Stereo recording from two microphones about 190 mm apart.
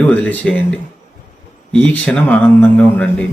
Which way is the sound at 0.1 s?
5° left (ahead or behind).